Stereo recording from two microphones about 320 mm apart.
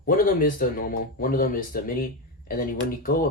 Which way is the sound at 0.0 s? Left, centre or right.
Left.